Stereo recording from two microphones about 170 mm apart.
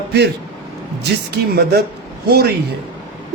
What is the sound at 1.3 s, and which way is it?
Speech, 70° right (ahead or behind).